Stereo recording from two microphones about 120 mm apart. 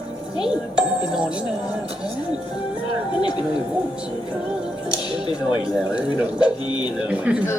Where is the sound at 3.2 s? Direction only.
40° left (ahead or behind).